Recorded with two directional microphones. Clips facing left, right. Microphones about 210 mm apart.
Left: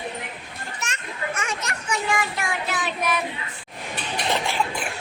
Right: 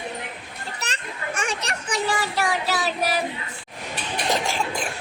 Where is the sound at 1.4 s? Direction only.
35° right (ahead or behind).